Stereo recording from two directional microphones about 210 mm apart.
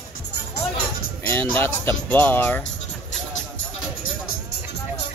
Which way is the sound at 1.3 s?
10° left (ahead or behind).